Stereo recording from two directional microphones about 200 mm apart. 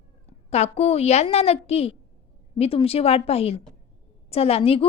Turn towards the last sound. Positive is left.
turn(degrees=30)  # may be behind; listen again after turning